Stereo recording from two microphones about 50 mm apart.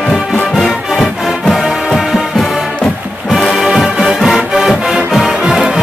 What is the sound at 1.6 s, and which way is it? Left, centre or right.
Music, centre.